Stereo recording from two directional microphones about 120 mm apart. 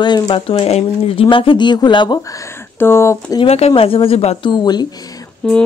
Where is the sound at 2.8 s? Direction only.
20° left (ahead or behind).